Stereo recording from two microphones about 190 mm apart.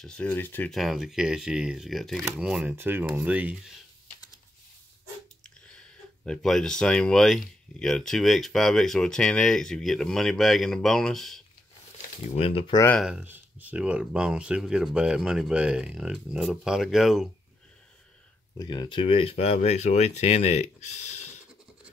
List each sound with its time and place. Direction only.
0.0 s speech: 10° left (ahead or behind); by 3.7 s 5° right (ahead or behind)
5.4 s speech: 5° left (ahead or behind)
12.2 s speech: 35° left (ahead or behind)
12.7 s speech: 10° left (ahead or behind)
13.0 s speech: 5° right (ahead or behind)
18.6 s speech: 25° left (ahead or behind)